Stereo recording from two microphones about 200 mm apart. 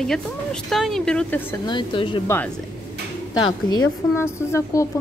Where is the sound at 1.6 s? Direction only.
25° left (ahead or behind).